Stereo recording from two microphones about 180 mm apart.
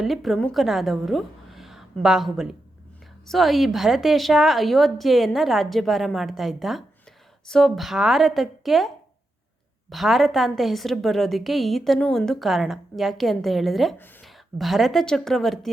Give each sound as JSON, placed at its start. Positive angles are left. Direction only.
{"t": 0.0, "sound": "a woman's voice", "side_deg": 0}
{"t": 9.9, "sound": "a woman's voice", "side_deg": 0}